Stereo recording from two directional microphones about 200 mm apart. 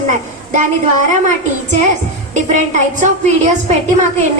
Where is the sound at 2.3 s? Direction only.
35° right (ahead or behind).